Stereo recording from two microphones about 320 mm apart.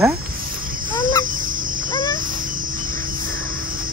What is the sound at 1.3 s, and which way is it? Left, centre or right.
Cricket, right.